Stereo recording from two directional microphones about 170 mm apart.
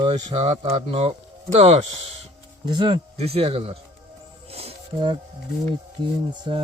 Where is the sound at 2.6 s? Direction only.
25° right (ahead or behind).